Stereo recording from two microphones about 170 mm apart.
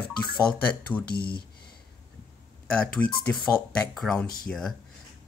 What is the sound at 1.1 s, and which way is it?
Speech, 65° left (ahead or behind).